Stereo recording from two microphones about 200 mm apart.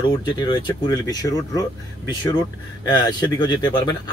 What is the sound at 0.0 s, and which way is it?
Speech, 20° left (ahead or behind).